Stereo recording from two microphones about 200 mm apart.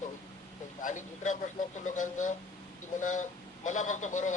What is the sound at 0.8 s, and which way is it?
A man's voice, 40° left (ahead or behind).